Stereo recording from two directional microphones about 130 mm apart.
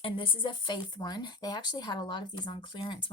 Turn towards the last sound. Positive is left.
turn(degrees=40)  # may be behind; listen again after turning